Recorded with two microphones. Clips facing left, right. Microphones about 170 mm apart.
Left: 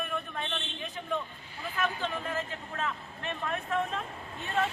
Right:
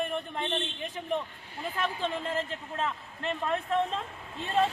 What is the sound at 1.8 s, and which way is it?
Speech, 25° right (ahead or behind).